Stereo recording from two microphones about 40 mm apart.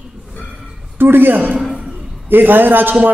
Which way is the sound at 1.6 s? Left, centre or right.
Centre.